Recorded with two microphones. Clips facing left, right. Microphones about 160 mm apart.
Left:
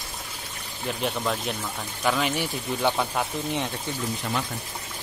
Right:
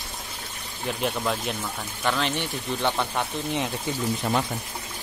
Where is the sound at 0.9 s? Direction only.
Centre (ahead or behind).